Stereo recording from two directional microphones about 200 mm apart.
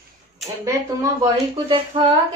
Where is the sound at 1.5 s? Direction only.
25° right (ahead or behind).